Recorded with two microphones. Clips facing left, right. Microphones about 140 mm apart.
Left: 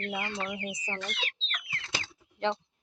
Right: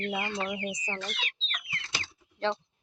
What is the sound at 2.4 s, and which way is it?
Speech, 20° left (ahead or behind).